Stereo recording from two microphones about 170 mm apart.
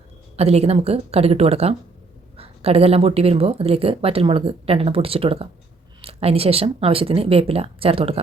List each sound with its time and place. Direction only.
0.3 s speech: 35° right (ahead or behind)